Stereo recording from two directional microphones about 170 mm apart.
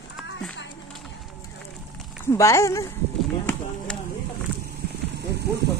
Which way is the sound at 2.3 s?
15° left (ahead or behind).